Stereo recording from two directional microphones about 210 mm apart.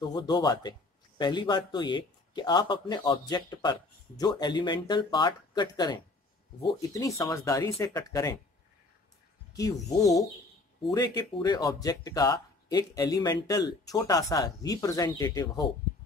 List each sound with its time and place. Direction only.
0.0 s a man's voice: 20° left (ahead or behind)
9.5 s speech: 15° left (ahead or behind)
10.9 s speech: 20° left (ahead or behind)